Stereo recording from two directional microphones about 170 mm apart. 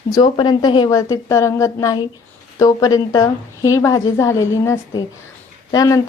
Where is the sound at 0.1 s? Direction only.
25° left (ahead or behind).